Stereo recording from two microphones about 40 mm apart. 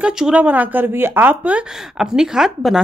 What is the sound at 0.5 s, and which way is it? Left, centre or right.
Speech, right.